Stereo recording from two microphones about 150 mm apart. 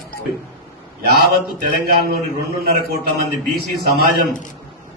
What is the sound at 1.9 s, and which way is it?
Speech, 90° right.